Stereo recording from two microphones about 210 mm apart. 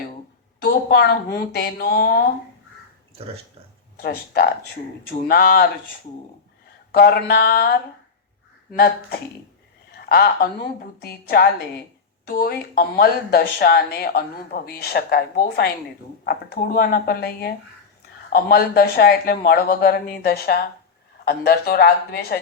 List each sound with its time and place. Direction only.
0.6 s speech: 45° left (ahead or behind)
3.9 s speech: 45° left (ahead or behind)
6.9 s speech: 50° left (ahead or behind)